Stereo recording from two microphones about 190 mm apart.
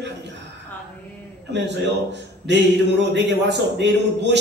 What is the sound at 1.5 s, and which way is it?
A man's voice, 65° right (ahead or behind).